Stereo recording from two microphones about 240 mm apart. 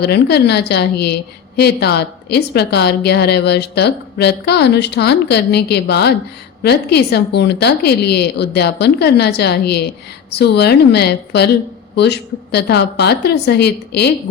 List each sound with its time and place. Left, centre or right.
0.0 s a woman's voice: left